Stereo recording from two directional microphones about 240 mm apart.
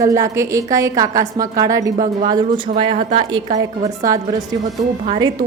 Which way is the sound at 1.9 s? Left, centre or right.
Right.